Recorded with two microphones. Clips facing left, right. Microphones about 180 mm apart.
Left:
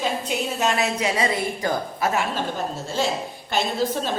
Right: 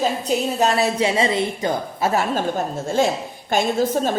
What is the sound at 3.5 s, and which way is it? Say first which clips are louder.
Speech: right 5 dB; 50° right (ahead or behind).